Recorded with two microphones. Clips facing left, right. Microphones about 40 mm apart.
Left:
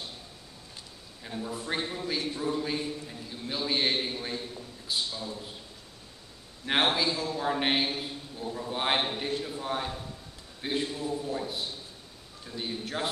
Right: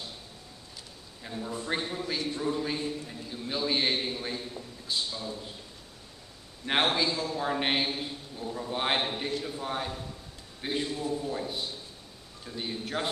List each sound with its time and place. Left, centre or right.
1.4 s a man's voice: centre
6.6 s a man's voice: centre